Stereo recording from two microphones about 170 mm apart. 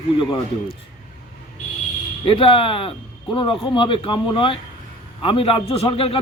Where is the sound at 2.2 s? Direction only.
30° left (ahead or behind).